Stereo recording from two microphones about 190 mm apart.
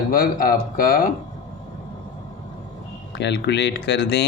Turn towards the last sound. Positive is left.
turn(degrees=60)  # may be behind; listen again after turning